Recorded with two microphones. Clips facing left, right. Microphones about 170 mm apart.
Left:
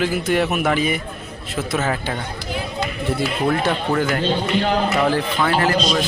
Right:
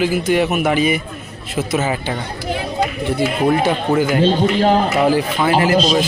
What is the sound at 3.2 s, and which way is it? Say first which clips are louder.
Speech: right 5 dB; 10° right (ahead or behind).